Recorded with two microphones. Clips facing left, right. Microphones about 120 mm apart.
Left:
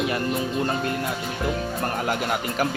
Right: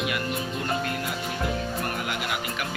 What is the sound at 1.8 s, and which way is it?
Speech, 40° left (ahead or behind).